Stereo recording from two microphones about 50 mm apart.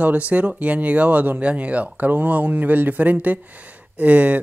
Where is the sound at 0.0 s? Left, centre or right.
Right.